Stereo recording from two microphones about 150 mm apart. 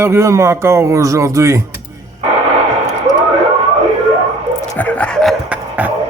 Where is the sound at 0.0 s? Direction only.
20° right (ahead or behind).